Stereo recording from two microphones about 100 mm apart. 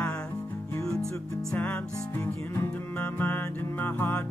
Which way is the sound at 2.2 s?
15° left (ahead or behind).